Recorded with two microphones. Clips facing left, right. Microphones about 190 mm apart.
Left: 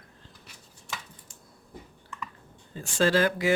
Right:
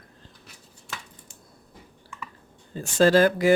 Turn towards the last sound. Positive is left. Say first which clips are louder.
# right 6 dB
turn(degrees=-45)  # may be behind; listen again after turning